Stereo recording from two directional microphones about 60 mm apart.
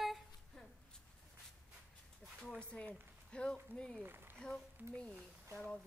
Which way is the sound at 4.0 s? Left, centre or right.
Right.